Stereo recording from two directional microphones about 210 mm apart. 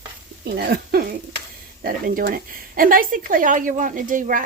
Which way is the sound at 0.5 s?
45° right (ahead or behind).